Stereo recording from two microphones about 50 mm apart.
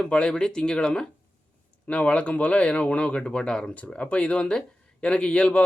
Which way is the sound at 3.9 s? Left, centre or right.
Left.